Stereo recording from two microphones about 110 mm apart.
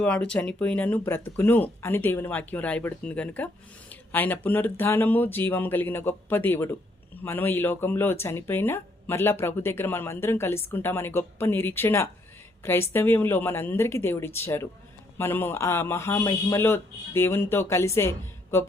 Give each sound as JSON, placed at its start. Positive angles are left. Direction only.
{"t": 0.0, "sound": "speech", "side_deg": 10}